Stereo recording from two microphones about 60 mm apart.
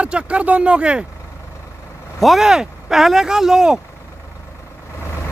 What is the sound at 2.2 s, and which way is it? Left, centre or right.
Speech, centre.